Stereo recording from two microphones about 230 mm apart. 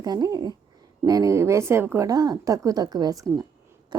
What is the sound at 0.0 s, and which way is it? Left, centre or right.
Speech, centre.